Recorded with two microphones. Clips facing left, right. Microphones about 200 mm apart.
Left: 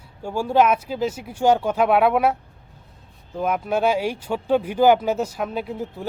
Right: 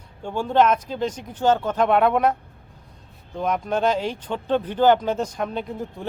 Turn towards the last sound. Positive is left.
turn(degrees=5)  # may be behind; listen again after turning